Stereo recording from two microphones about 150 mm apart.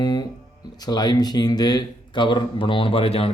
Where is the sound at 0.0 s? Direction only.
25° left (ahead or behind).